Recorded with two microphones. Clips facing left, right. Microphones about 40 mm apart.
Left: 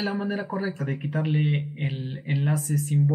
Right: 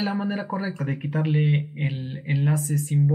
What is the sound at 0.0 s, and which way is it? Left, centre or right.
Speech, centre.